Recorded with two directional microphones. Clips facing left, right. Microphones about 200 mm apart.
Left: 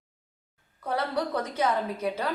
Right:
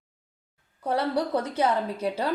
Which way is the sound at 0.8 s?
30° right (ahead or behind).